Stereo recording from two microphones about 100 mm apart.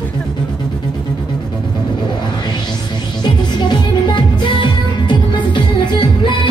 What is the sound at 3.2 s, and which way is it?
Music, 45° left (ahead or behind).